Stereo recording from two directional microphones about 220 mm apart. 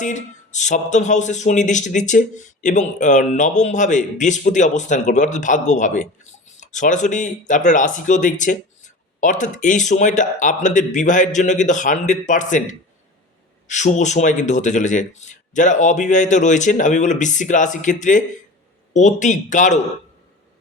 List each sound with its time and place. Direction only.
0.0 s speech: 35° left (ahead or behind)